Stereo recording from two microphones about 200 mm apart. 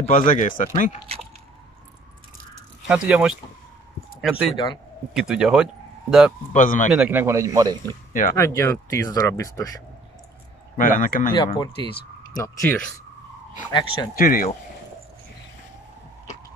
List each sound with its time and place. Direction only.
0.0 s speech: 35° left (ahead or behind)
2.9 s speech: 5° right (ahead or behind)
6.5 s speech: 40° left (ahead or behind)
6.9 s a man's voice: 5° right (ahead or behind)
8.1 s speech: 40° left (ahead or behind)
8.4 s speech: 15° left (ahead or behind)
10.8 s speech: 45° left (ahead or behind)
11.3 s speech: 25° left (ahead or behind)
12.5 s speech: 10° left (ahead or behind)
14.1 s speech: 45° left (ahead or behind)